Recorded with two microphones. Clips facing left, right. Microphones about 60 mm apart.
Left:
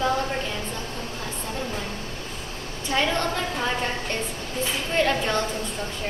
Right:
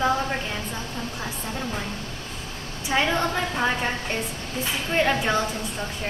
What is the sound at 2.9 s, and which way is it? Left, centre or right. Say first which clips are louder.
A woman's voice: right 1 dB; centre.